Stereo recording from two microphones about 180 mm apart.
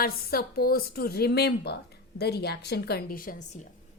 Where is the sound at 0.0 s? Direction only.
60° left (ahead or behind).